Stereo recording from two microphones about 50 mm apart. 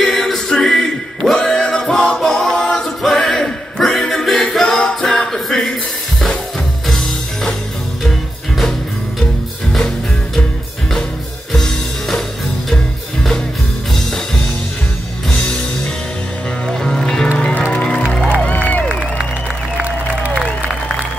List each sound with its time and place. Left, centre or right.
0.0 s music: centre
9.2 s music: centre
11.5 s music: centre
16.6 s music: centre
18.5 s a sound: left